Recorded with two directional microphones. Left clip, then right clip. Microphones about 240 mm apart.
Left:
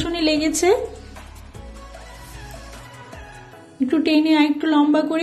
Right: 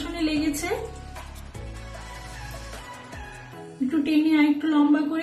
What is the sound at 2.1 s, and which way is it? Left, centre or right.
Music, centre.